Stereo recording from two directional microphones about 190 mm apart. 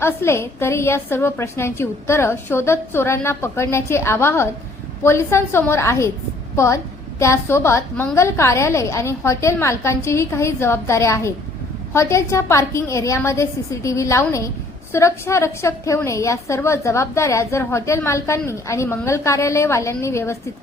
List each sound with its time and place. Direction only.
0.0 s a woman's voice: 15° left (ahead or behind)